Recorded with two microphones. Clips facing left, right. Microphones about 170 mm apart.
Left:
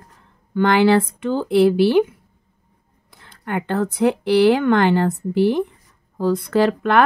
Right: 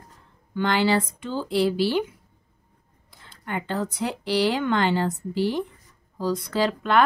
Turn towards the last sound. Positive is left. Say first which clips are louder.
# left 5 dB
turn(degrees=55)  # may be behind; listen again after turning